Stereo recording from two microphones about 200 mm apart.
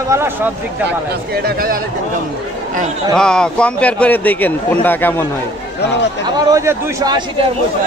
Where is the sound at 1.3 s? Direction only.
50° right (ahead or behind).